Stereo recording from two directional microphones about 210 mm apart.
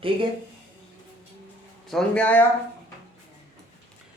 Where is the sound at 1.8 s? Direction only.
5° left (ahead or behind).